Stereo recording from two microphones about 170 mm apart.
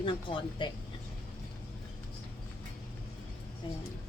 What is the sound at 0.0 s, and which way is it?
Speech, 30° left (ahead or behind).